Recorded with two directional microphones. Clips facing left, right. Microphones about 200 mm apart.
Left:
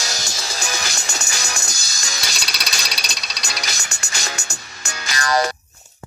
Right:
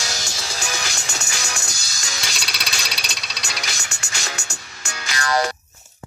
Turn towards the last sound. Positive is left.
turn(degrees=40)  # may be behind; listen again after turning